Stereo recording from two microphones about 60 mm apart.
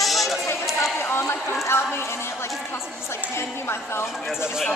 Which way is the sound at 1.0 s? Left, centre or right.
Left.